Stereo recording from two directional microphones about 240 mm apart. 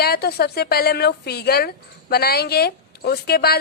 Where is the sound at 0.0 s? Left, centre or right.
Left.